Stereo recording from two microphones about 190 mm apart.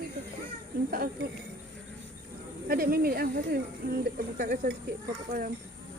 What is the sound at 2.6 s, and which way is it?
Speech, 50° right (ahead or behind).